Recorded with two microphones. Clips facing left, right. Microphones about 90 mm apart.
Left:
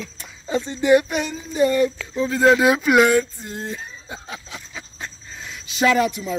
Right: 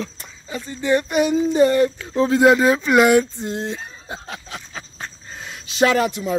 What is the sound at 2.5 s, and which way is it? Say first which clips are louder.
Speech: even; 10° left (ahead or behind).